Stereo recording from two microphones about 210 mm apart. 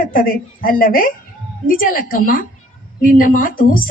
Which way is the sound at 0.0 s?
40° left (ahead or behind).